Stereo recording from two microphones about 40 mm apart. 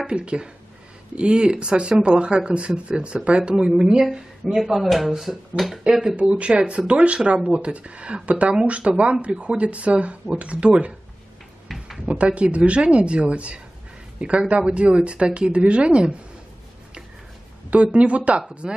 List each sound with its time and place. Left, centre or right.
0.0 s speech: right
4.6 s speech: centre
5.9 s speech: right
12.1 s speech: right
17.9 s speech: right